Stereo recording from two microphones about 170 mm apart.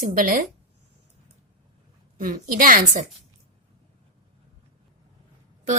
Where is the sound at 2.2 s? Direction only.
55° right (ahead or behind).